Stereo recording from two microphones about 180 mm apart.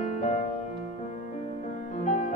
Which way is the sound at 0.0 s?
40° left (ahead or behind).